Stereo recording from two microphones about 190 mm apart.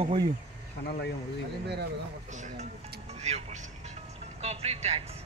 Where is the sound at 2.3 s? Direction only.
40° right (ahead or behind).